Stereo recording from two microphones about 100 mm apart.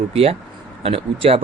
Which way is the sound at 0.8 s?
70° right (ahead or behind).